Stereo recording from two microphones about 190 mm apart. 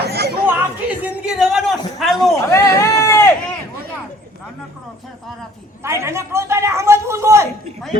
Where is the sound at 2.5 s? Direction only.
15° left (ahead or behind).